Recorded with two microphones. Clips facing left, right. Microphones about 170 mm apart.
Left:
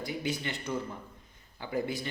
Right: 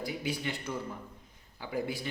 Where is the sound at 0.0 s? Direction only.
5° right (ahead or behind).